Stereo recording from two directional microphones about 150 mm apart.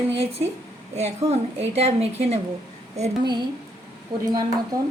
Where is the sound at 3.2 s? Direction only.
30° right (ahead or behind).